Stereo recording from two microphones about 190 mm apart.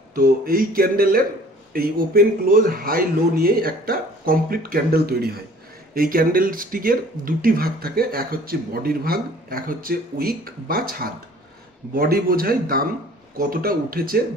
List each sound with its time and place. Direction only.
0.1 s speech: 50° right (ahead or behind)